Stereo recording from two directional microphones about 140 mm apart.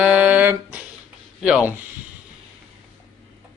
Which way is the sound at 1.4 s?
5° right (ahead or behind).